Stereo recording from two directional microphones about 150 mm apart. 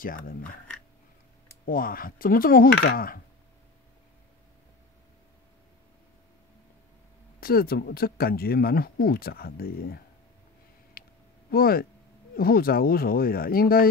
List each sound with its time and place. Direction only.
0.0 s cutlery: 65° left (ahead or behind)
0.7 s a sound: 10° left (ahead or behind)
1.7 s cutlery: 70° left (ahead or behind)
7.3 s speech: 80° left
11.0 s a sound: 90° left
11.5 s speech: 85° left